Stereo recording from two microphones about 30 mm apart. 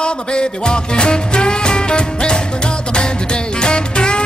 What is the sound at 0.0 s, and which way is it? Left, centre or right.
Music, left.